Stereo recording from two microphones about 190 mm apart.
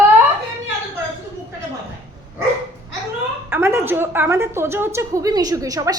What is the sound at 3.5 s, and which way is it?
A woman's voice, 15° right (ahead or behind).